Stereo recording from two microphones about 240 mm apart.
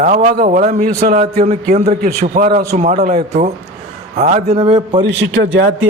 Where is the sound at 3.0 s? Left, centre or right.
Right.